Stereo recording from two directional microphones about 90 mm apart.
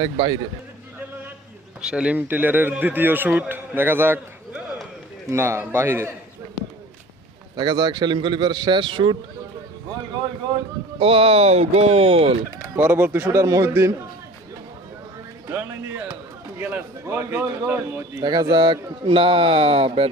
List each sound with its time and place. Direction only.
0.0 s speech: 65° right (ahead or behind)
1.8 s speech: 10° right (ahead or behind)
5.3 s speech: 30° right (ahead or behind)
7.5 s a man's voice: 55° right (ahead or behind)
11.0 s speech: 90° right
12.7 s speech: 20° right (ahead or behind)
13.3 s speech: 35° right (ahead or behind)
15.4 s music: 30° right (ahead or behind)
16.6 s a sound: 20° right (ahead or behind)
17.0 s speech: 30° right (ahead or behind)
18.2 s a man's voice: 50° right (ahead or behind); by 20.1 s 90° right